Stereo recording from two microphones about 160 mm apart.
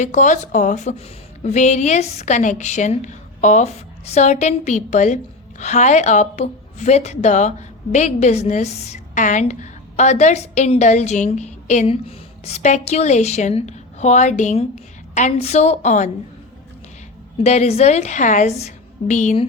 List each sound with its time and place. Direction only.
0.0 s a woman's voice: 50° left (ahead or behind)
17.3 s a woman's voice: 45° left (ahead or behind)